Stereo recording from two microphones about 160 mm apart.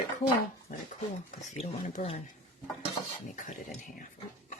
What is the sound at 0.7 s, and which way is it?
Speech, 60° left (ahead or behind).